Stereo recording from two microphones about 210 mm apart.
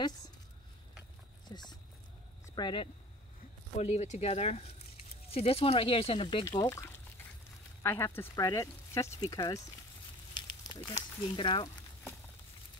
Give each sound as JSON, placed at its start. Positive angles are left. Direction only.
{"t": 1.5, "sound": "speech", "side_deg": 20}
{"t": 3.7, "sound": "speech", "side_deg": 35}